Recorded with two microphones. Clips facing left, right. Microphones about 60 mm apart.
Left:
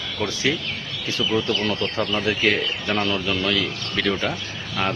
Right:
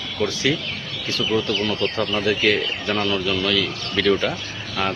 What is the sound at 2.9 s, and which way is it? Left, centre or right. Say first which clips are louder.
Speech: right 1 dB; left.